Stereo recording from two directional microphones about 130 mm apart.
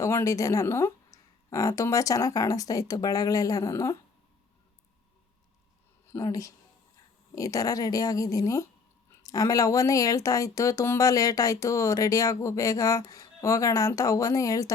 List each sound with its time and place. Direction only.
0.0 s speech: 20° left (ahead or behind)
6.1 s speech: 25° left (ahead or behind)